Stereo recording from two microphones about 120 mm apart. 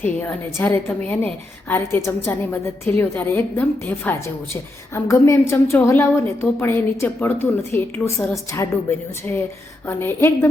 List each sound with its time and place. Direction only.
0.2 s a woman's voice: 20° left (ahead or behind)